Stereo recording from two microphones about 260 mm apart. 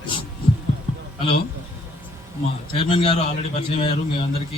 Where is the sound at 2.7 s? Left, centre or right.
Left.